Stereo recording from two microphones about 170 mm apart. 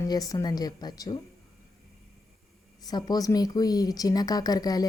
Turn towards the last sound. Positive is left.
turn(degrees=20)  # may be behind; listen again after turning